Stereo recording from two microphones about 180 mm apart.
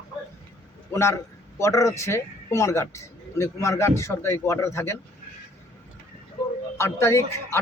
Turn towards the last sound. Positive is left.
turn(degrees=15)  # may be behind; listen again after turning